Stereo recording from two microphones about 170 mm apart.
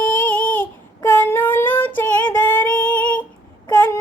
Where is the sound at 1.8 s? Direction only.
10° left (ahead or behind).